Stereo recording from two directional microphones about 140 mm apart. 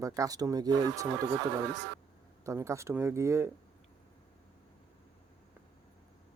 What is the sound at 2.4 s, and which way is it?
Speech, 20° right (ahead or behind).